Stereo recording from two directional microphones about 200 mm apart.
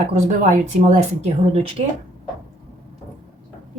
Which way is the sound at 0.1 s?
40° right (ahead or behind).